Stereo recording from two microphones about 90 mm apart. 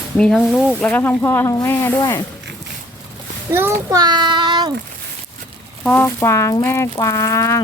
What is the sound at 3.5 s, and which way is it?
Speech, 30° right (ahead or behind).